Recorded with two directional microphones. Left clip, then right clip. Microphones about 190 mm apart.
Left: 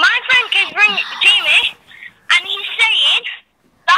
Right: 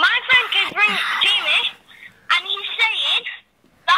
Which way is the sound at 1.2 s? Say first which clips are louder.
Left 8 dB; 10° left (ahead or behind).